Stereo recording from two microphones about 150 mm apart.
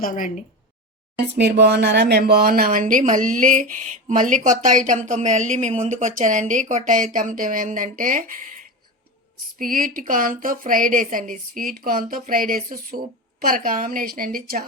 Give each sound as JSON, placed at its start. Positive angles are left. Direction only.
{"t": 0.0, "sound": "speech", "side_deg": 60}
{"t": 1.6, "sound": "speech", "side_deg": -90}
{"t": 9.6, "sound": "a woman's voice", "side_deg": -65}